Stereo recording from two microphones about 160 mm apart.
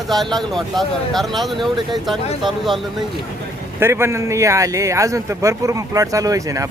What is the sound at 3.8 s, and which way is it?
A man's voice, 15° right (ahead or behind).